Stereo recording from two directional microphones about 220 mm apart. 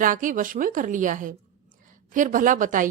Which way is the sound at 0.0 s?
35° right (ahead or behind).